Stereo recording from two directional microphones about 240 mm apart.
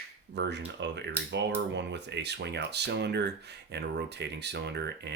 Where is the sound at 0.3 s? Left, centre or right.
Right.